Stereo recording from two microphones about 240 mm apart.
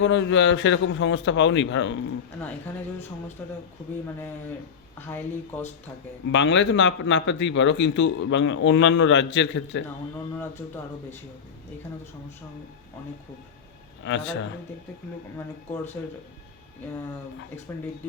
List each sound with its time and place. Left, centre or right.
0.0 s a man's voice: left
4.9 s speech: centre
6.3 s a man's voice: left
14.0 s a man's voice: left
15.4 s speech: centre